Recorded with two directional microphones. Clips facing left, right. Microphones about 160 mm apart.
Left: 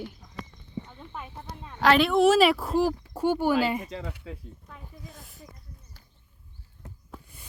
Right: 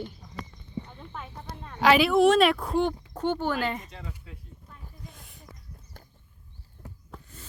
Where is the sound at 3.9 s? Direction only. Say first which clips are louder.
Left 7 dB; 75° left (ahead or behind).